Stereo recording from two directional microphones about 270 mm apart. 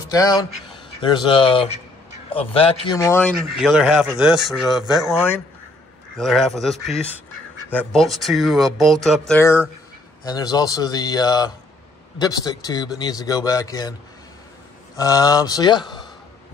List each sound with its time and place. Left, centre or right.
0.1 s speech: centre
15.0 s speech: centre